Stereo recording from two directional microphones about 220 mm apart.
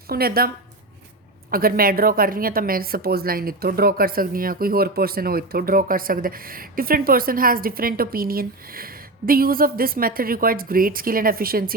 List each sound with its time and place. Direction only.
0.1 s a woman's voice: 45° right (ahead or behind)